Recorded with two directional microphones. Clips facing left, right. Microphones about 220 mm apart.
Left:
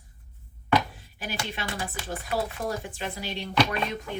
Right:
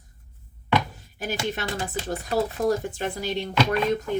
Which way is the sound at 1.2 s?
45° right (ahead or behind).